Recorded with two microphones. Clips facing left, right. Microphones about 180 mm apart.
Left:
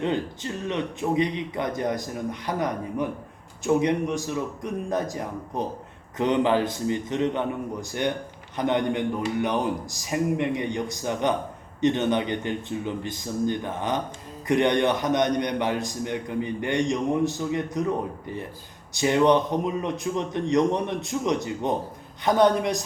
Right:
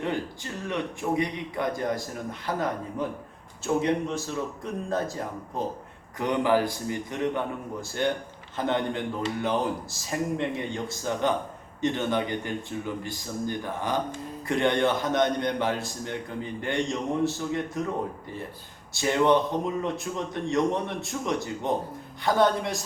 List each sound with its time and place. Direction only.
0.0 s a man's voice: 20° left (ahead or behind)
18.9 s a man's voice: 20° left (ahead or behind)